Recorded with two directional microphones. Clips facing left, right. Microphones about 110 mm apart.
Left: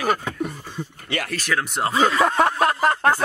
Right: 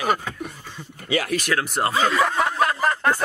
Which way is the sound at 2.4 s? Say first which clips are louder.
Left 2 dB; 35° left (ahead or behind).